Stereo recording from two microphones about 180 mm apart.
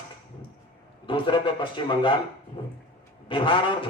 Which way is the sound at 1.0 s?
25° left (ahead or behind).